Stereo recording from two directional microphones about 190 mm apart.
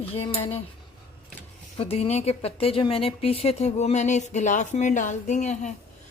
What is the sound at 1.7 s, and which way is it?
Speech, 30° left (ahead or behind).